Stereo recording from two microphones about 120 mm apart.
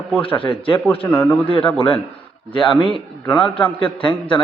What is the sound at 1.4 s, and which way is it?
A man's voice, 50° left (ahead or behind).